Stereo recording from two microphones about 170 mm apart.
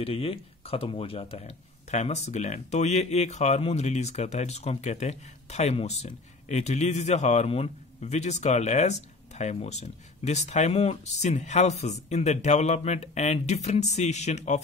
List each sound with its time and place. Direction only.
0.0 s speech: 35° left (ahead or behind)